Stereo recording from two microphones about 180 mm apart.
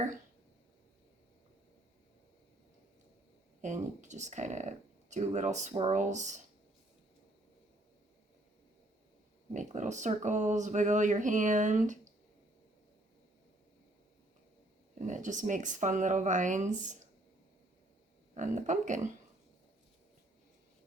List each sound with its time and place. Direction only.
3.6 s speech: 40° right (ahead or behind)
9.5 s speech: 40° right (ahead or behind)
14.9 s speech: 45° right (ahead or behind)
18.3 s speech: 40° right (ahead or behind)